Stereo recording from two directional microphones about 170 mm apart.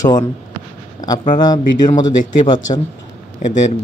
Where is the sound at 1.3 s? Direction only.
25° left (ahead or behind).